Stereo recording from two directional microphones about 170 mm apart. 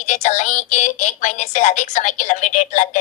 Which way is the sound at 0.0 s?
45° left (ahead or behind).